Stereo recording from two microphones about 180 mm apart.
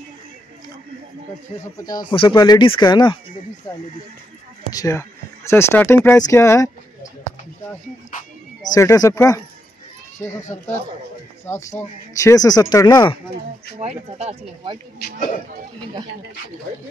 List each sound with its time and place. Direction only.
1.8 s speech: 20° left (ahead or behind)
4.7 s speech: 15° left (ahead or behind)
8.7 s speech: 20° left (ahead or behind)
11.4 s speech: 15° left (ahead or behind)
13.7 s speech: 35° right (ahead or behind)